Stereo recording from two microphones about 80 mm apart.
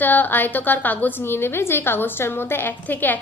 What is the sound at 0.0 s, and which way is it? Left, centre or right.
A woman's voice, left.